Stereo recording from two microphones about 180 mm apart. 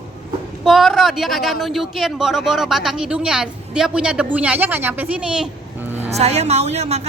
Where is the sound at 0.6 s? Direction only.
Centre (ahead or behind).